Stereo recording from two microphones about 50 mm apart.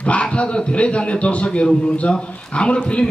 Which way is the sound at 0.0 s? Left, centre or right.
Left.